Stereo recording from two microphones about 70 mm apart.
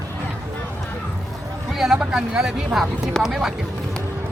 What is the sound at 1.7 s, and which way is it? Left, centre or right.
Speech, centre.